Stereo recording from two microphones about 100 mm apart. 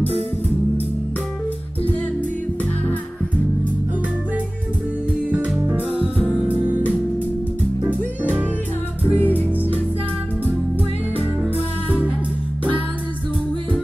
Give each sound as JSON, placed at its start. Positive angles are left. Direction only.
{"t": 9.1, "sound": "music", "side_deg": 20}